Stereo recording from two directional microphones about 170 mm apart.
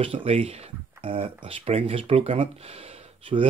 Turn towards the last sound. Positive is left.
turn(degrees=-30)  # may be behind; listen again after turning